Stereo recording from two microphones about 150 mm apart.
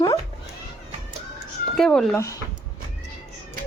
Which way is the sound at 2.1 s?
20° left (ahead or behind).